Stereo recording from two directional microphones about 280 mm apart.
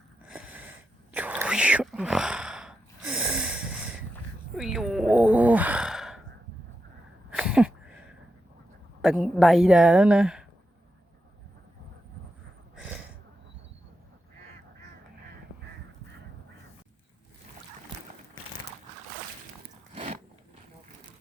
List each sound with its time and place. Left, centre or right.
0.3 s sniff: centre
1.1 s whispering: centre
4.5 s a sound: centre
7.3 s a sound: centre
9.0 s speech: centre
19.9 s biting: right